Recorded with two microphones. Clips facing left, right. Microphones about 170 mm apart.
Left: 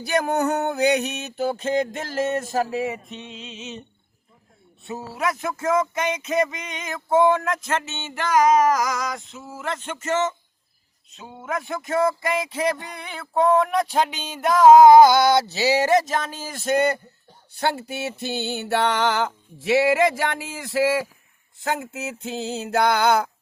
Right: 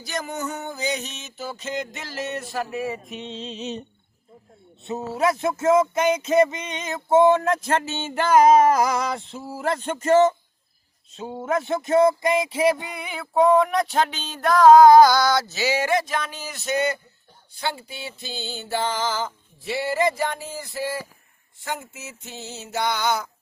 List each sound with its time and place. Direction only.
0.0 s music: 60° left (ahead or behind)
3.1 s speech: 20° right (ahead or behind)
3.3 s music: 35° right (ahead or behind)
4.8 s speech: 20° right (ahead or behind)
11.1 s a sound: 30° right (ahead or behind); by 21.1 s 90° left
21.6 s a sound: 65° left (ahead or behind)